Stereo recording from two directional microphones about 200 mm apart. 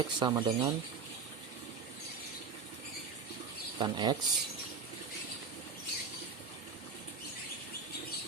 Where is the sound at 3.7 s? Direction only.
20° right (ahead or behind).